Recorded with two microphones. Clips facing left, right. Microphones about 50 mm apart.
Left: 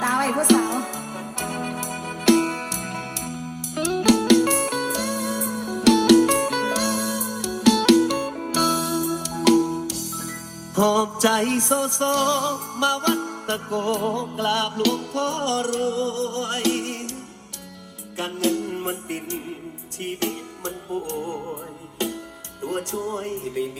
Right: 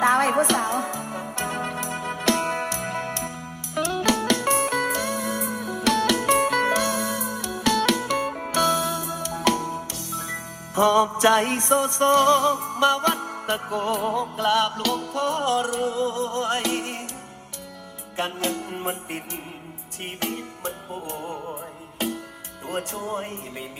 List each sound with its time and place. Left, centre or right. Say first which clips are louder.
0.0 s music: right 3 dB; right
8.5 s music: even; right; by 17.1 s centre
18.2 s music: left 3 dB; right
18.7 s music: left 2 dB; centre
22.6 s music: left 3 dB; centre